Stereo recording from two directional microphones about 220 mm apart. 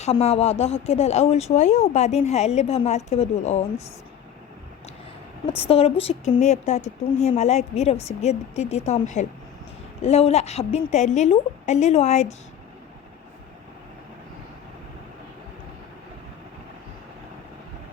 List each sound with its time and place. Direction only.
0.0 s speech: 30° left (ahead or behind)
5.5 s speech: 25° left (ahead or behind)